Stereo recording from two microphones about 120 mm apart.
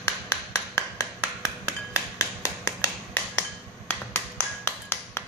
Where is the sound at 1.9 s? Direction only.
25° left (ahead or behind).